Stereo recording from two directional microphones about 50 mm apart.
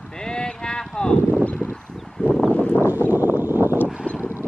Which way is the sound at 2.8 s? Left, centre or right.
Right.